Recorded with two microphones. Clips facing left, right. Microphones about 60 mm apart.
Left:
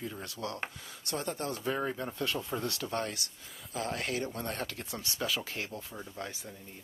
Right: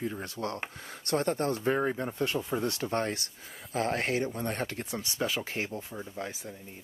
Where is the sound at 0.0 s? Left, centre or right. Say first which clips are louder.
Right 5 dB; right.